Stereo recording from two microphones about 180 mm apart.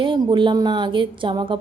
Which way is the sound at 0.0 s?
25° right (ahead or behind).